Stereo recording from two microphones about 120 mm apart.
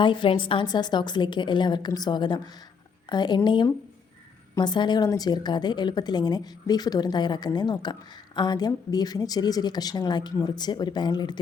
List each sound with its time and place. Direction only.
0.0 s a woman's voice: 40° left (ahead or behind)